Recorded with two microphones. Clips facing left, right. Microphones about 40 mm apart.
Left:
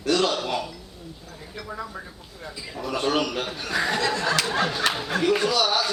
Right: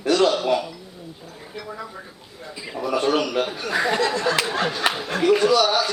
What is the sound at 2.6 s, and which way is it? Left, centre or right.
Bird, centre.